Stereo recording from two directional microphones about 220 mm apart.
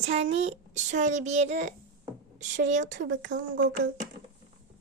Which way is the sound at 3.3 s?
55° right (ahead or behind).